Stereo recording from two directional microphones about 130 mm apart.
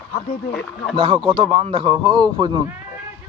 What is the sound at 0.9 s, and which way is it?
Speech, 40° right (ahead or behind).